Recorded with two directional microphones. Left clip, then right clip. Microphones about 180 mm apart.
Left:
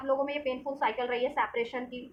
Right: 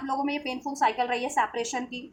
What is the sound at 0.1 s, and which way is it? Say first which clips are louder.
A woman's voice: even; 40° right (ahead or behind).